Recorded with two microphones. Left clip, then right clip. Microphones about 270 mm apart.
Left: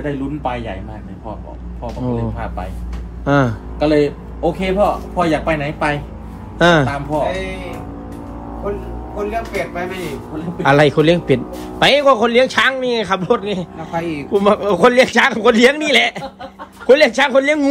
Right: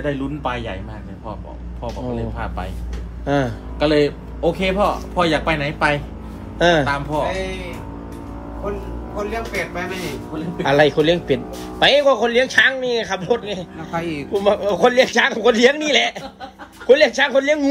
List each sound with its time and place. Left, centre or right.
0.0 s speech: centre
2.3 s speech: centre
3.3 s a man's voice: centre
4.0 s speech: centre
6.6 s a man's voice: centre
6.9 s speech: centre
9.1 s speech: centre
10.6 s a man's voice: centre
13.7 s speech: centre
14.4 s a man's voice: left